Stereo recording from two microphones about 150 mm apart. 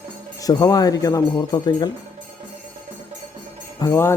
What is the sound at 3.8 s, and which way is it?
Speech, 20° left (ahead or behind).